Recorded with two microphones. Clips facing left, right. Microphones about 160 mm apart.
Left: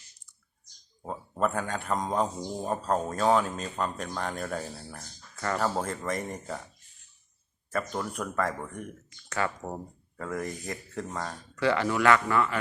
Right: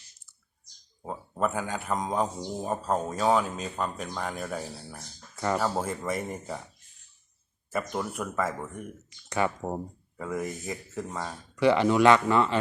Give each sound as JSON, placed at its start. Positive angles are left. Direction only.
{"t": 1.0, "sound": "speech", "side_deg": -5}
{"t": 7.7, "sound": "speech", "side_deg": -10}
{"t": 9.3, "sound": "speech", "side_deg": -20}
{"t": 10.2, "sound": "speech", "side_deg": -5}
{"t": 11.6, "sound": "a man's voice", "side_deg": -20}